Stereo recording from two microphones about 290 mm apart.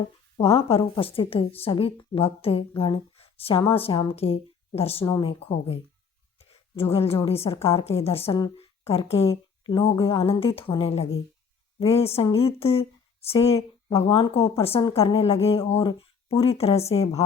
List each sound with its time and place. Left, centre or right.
0.4 s speech: centre